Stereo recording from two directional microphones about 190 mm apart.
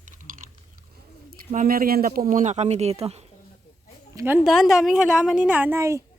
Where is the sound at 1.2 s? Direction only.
45° right (ahead or behind).